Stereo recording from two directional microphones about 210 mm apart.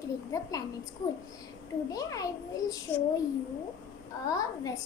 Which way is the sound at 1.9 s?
15° left (ahead or behind).